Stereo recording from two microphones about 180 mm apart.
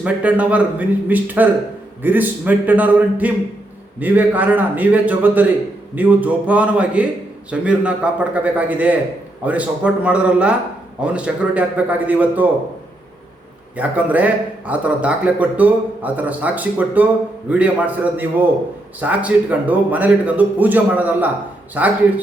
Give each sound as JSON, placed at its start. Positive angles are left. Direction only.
{"t": 0.0, "sound": "speech", "side_deg": -5}
{"t": 13.7, "sound": "speech", "side_deg": -10}